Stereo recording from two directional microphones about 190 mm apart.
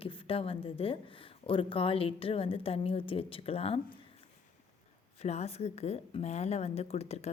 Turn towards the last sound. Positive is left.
turn(degrees=35)  # may be behind; listen again after turning